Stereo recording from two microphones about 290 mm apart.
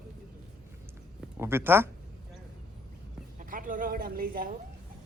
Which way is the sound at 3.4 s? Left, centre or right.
Right.